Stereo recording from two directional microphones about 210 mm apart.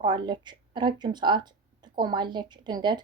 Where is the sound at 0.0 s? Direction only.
20° right (ahead or behind).